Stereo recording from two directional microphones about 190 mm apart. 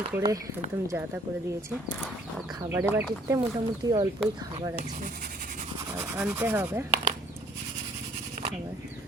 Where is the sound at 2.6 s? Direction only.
15° right (ahead or behind).